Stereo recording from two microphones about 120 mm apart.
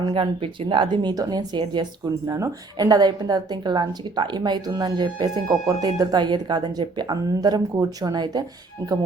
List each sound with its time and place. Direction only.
0.0 s a woman's voice: 45° right (ahead or behind)
2.2 s a woman's voice: 30° right (ahead or behind)
8.8 s speech: 25° right (ahead or behind)